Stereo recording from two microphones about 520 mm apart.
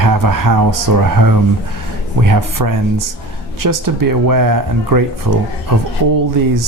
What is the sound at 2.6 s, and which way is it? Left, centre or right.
Speech, right.